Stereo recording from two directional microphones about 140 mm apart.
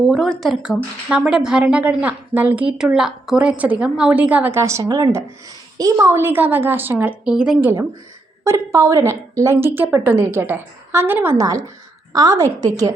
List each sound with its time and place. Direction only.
0.1 s a woman's voice: centre (ahead or behind)
8.4 s a woman's voice: 20° right (ahead or behind)